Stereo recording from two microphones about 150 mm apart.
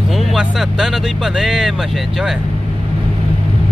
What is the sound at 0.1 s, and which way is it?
Speech, centre (ahead or behind).